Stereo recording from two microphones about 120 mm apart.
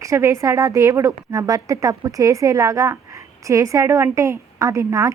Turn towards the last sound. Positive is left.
turn(degrees=-25)  # may be behind; listen again after turning